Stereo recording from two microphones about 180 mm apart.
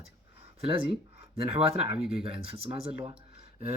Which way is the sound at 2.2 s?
30° right (ahead or behind).